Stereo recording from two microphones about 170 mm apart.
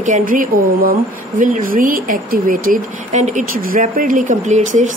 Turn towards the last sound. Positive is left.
turn(degrees=-45)  # may be behind; listen again after turning